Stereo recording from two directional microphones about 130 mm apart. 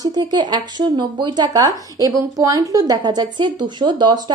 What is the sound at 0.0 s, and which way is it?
A woman's voice, 30° right (ahead or behind).